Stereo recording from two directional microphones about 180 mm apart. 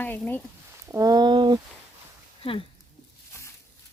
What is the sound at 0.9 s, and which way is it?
Speech, 20° right (ahead or behind).